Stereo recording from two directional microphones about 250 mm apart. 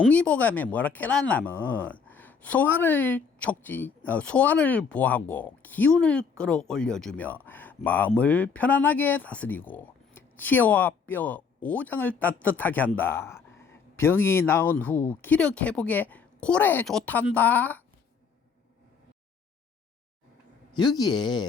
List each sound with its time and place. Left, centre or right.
0.0 s speech: centre
20.7 s speech: centre